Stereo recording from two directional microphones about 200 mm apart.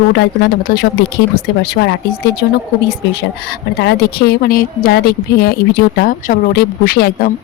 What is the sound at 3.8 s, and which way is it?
A woman's voice, 55° left (ahead or behind).